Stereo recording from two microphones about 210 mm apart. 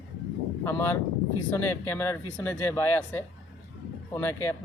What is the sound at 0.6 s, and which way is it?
A man's voice, 10° left (ahead or behind).